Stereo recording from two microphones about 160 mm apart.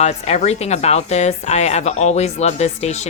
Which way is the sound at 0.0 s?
45° left (ahead or behind).